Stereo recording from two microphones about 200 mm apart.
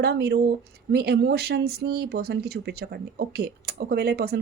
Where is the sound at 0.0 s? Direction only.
55° right (ahead or behind).